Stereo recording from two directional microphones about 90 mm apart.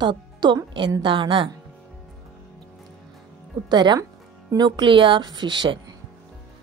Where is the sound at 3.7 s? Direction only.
55° right (ahead or behind).